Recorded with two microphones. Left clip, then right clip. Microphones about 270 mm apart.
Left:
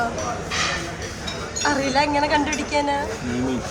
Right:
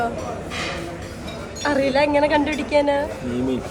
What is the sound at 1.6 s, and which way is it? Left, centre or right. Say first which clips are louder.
A woman's voice: right 2 dB; centre.